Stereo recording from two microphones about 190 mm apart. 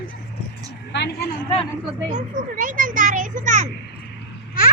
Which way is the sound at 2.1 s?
45° right (ahead or behind).